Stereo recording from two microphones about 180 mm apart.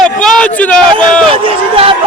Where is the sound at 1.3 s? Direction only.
30° right (ahead or behind).